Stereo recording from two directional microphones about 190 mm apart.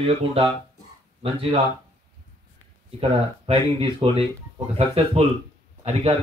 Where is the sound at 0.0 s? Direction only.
30° right (ahead or behind).